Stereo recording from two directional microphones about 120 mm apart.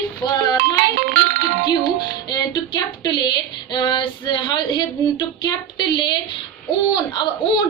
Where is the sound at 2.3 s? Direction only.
40° left (ahead or behind).